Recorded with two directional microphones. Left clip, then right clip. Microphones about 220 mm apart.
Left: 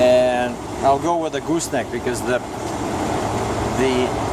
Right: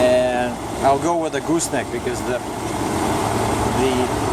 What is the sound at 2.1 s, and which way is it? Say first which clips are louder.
Speech: left 4 dB; 20° left (ahead or behind).